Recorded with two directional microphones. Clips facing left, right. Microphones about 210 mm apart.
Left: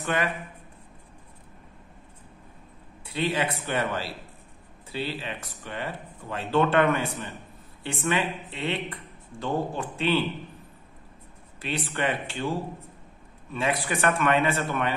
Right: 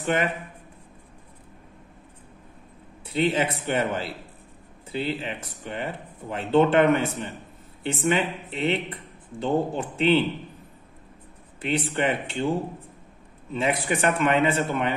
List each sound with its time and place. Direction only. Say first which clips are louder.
0.0 s a man's voice: right 3 dB; 25° right (ahead or behind)
3.1 s speech: right 4 dB; 25° right (ahead or behind)
11.6 s speech: right 4 dB; 20° right (ahead or behind)